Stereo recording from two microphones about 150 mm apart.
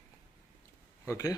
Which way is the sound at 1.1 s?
20° left (ahead or behind).